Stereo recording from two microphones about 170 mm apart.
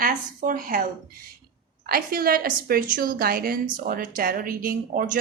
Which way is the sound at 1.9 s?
60° right (ahead or behind).